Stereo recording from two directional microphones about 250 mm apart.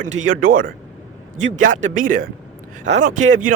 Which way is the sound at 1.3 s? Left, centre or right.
Right.